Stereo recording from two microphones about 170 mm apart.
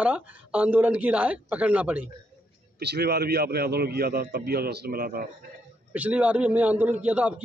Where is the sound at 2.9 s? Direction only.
70° right (ahead or behind).